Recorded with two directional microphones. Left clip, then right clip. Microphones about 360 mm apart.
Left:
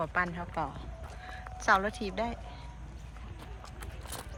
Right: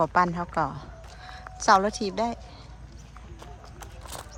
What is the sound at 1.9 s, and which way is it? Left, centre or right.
Speech, right.